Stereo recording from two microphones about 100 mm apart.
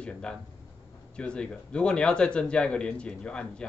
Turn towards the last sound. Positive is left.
turn(degrees=10)  # may be behind; listen again after turning